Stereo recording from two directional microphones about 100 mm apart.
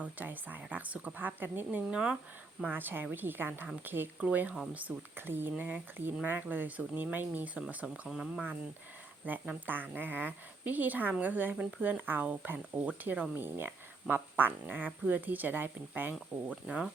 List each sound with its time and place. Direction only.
0.0 s speech: 15° right (ahead or behind)
2.6 s a woman's voice: 20° right (ahead or behind)